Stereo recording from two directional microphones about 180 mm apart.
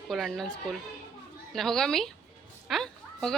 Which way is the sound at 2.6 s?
Centre (ahead or behind).